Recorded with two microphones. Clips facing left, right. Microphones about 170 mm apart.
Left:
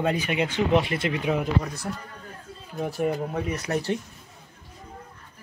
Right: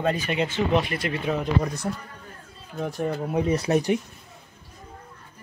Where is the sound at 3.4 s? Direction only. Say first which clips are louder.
Right 6 dB; 30° right (ahead or behind).